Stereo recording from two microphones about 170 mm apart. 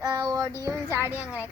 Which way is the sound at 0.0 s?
25° right (ahead or behind).